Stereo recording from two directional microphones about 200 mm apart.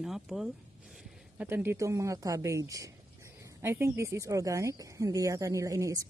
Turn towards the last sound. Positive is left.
turn(degrees=-15)  # may be behind; listen again after turning